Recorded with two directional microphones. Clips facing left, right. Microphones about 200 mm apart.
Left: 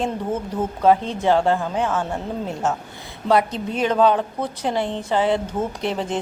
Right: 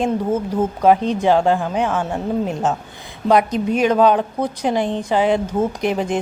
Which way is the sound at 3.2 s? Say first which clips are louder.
Right 4 dB; 15° right (ahead or behind).